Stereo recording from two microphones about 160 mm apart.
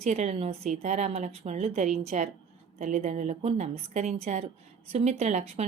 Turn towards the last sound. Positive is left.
turn(degrees=-45)  # may be behind; listen again after turning